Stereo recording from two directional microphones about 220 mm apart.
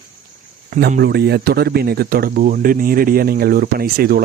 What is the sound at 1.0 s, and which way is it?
Speech, 50° right (ahead or behind).